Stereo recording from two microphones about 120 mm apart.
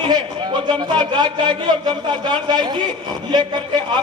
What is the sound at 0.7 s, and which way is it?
Speech, 35° right (ahead or behind).